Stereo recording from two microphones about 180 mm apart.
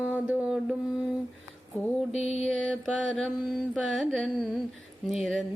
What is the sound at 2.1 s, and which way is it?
Mantra, 35° left (ahead or behind).